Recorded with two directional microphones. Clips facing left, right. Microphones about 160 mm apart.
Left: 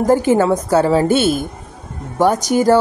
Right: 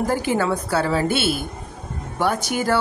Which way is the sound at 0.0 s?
45° left (ahead or behind).